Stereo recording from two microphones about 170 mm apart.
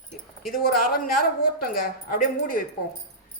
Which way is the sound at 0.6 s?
60° left (ahead or behind).